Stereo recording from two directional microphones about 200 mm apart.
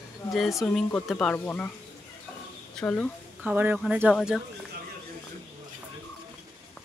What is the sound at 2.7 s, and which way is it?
Speech, 5° left (ahead or behind).